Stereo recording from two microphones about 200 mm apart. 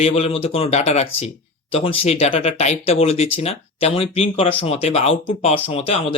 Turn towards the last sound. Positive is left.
turn(degrees=30)  # may be behind; listen again after turning